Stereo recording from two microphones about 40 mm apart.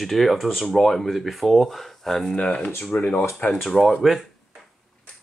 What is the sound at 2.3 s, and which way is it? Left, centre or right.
Speech, left.